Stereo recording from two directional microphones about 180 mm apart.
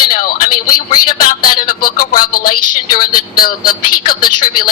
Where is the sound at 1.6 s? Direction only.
50° left (ahead or behind).